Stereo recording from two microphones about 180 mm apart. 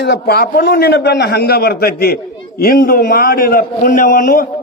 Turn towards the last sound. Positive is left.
turn(degrees=50)  # may be behind; listen again after turning